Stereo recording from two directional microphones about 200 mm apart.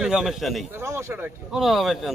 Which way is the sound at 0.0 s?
5° right (ahead or behind).